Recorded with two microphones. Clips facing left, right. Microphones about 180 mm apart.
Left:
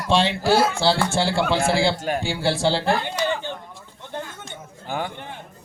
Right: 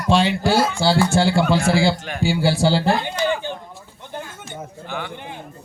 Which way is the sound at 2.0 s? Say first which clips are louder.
Left 4 dB; 40° left (ahead or behind).